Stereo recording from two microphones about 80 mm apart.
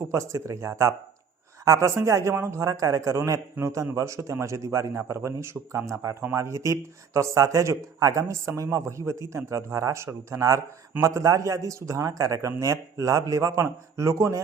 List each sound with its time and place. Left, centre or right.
0.0 s a man's voice: right